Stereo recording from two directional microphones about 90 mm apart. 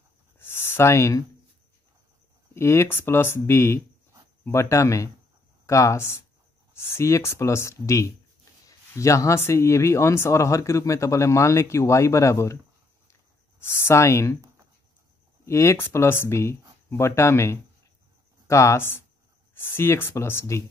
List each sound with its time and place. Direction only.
0.4 s a sound: 25° left (ahead or behind)
2.5 s speech: 30° left (ahead or behind)
13.6 s speech: 25° left (ahead or behind)
15.4 s speech: 30° left (ahead or behind)